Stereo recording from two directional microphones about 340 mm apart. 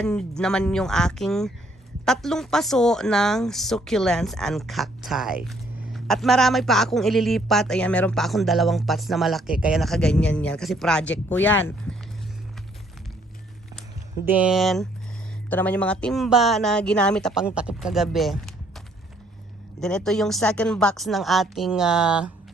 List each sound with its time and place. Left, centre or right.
0.0 s a woman's voice: centre
14.3 s a woman's voice: centre
19.8 s a woman's voice: centre